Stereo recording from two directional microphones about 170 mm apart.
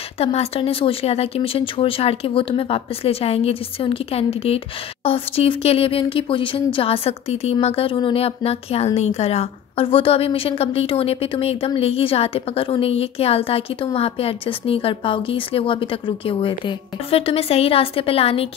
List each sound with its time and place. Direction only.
0.2 s a woman's voice: 35° left (ahead or behind)